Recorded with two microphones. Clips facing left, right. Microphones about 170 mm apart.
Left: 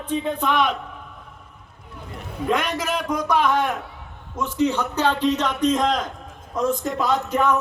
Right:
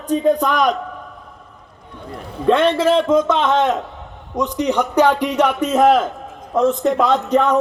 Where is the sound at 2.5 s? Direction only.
30° right (ahead or behind); by 6.9 s centre (ahead or behind).